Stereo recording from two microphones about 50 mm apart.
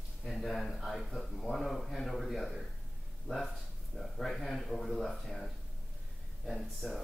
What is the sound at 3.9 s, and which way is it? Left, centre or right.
Speech, centre.